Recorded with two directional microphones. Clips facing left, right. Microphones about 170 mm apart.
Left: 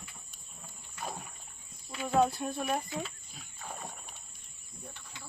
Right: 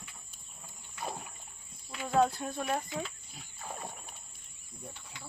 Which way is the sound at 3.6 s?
10° right (ahead or behind).